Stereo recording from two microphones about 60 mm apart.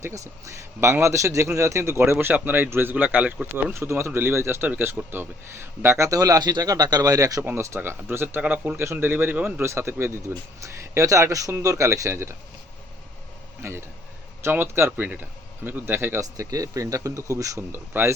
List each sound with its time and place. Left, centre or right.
0.0 s a man's voice: right
2.1 s speech: right
2.9 s speech: right
3.7 s a man's voice: right
6.1 s speech: right
7.7 s speech: right
8.1 s speech: right
8.4 s speech: right
8.7 s speech: right
9.6 s a man's voice: right
10.6 s speech: right
13.6 s speech: right
16.2 s speech: right
17.7 s speech: right